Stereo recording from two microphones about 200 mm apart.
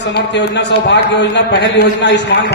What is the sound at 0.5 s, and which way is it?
A man's voice, 60° left (ahead or behind).